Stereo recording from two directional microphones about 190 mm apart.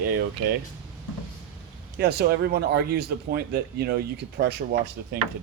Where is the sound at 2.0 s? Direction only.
55° right (ahead or behind).